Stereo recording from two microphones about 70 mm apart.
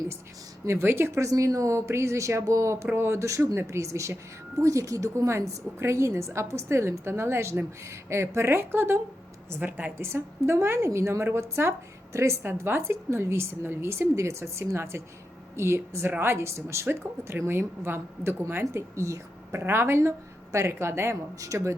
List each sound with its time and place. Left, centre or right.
0.6 s a woman's voice: right
1.3 s a woman's voice: right
9.6 s a woman's voice: right
10.0 s a woman's voice: right
12.4 s a woman's voice: right
21.4 s speech: right